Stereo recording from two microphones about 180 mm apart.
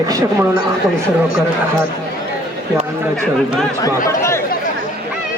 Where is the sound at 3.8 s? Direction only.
15° left (ahead or behind).